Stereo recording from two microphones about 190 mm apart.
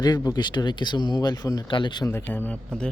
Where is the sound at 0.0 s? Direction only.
20° left (ahead or behind).